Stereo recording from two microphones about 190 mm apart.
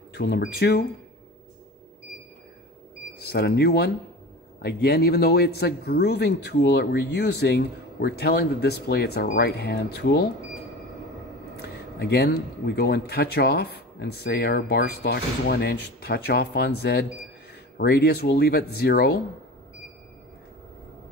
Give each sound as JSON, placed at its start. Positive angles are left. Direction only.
{"t": 0.1, "sound": "a man's voice", "side_deg": 60}
{"t": 3.2, "sound": "a man's voice", "side_deg": 60}
{"t": 11.6, "sound": "a man's voice", "side_deg": 60}